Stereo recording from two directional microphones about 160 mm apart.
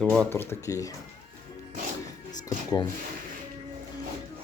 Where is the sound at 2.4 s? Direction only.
25° left (ahead or behind).